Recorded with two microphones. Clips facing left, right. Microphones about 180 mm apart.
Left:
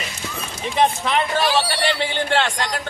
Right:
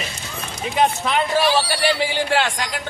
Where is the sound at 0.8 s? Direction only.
5° right (ahead or behind).